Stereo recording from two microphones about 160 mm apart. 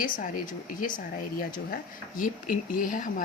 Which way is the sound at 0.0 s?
60° left (ahead or behind).